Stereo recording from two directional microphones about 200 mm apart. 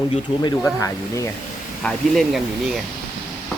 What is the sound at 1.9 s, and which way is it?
Speech, centre (ahead or behind).